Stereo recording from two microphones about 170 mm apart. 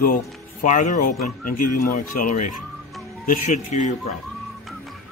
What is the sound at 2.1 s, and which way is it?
Speech, 50° left (ahead or behind).